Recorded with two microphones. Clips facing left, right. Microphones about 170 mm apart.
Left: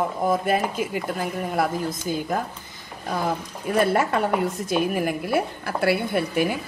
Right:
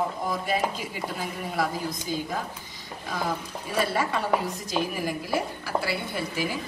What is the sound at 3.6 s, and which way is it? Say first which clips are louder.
A woman's voice: left 6 dB; 50° left (ahead or behind).